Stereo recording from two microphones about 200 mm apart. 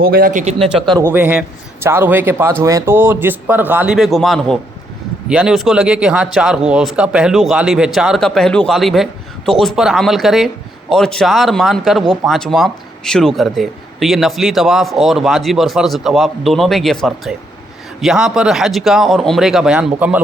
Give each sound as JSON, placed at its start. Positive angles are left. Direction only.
{"t": 0.0, "sound": "a man's voice", "side_deg": -45}
{"t": 0.6, "sound": "a man's voice", "side_deg": 0}
{"t": 0.9, "sound": "a man's voice", "side_deg": -10}